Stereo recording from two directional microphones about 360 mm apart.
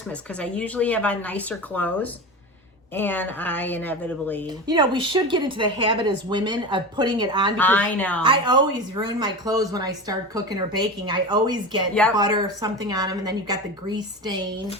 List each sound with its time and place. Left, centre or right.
0.3 s speech: centre
4.6 s speech: centre
7.5 s speech: centre
8.2 s speech: centre